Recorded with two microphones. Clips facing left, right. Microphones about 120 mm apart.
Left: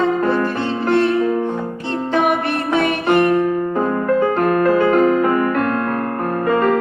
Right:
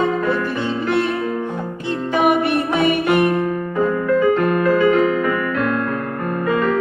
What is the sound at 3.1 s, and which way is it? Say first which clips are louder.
Music: left 2 dB; 50° left (ahead or behind).